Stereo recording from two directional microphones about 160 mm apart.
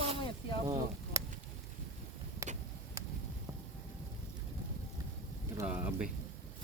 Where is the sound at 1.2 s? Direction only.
20° right (ahead or behind).